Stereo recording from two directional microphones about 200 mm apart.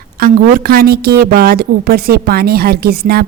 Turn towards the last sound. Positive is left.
turn(degrees=-50)  # may be behind; listen again after turning